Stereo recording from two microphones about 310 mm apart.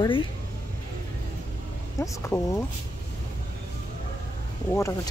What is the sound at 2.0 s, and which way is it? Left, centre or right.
Speech, centre.